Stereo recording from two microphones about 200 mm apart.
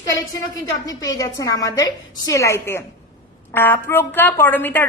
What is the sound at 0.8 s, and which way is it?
A woman's voice, 20° left (ahead or behind).